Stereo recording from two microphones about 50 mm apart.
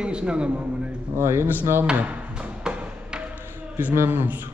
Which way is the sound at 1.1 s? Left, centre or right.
Right.